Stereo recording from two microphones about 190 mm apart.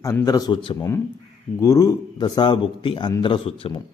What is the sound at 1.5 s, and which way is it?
A man's voice, 15° left (ahead or behind).